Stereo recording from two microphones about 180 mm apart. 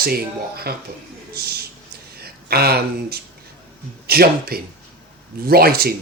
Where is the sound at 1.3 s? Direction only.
60° right (ahead or behind).